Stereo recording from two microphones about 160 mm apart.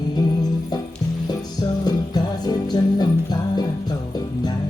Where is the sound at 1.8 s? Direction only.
25° left (ahead or behind).